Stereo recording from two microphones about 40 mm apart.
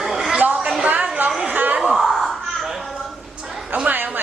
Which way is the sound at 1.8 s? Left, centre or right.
Centre.